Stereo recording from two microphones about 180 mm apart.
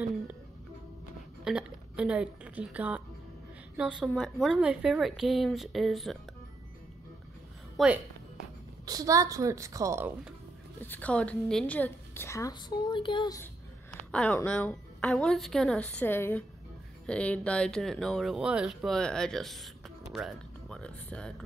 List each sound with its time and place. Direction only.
1.4 s a woman's voice: 5° right (ahead or behind)
7.7 s a woman's voice: 5° right (ahead or behind)
8.8 s a woman's voice: 20° right (ahead or behind)
10.8 s a woman's voice: 10° left (ahead or behind); by 13.4 s 25° left (ahead or behind)
14.1 s a woman's voice: 5° left (ahead or behind)